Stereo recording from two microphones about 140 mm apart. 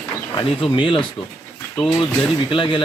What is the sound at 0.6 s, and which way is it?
Speech, 35° left (ahead or behind).